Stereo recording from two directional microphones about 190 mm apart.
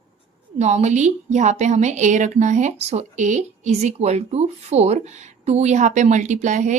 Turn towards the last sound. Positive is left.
turn(degrees=-40)  # may be behind; listen again after turning